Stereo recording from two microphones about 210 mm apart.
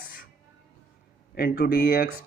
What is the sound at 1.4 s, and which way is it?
Speech, 45° left (ahead or behind).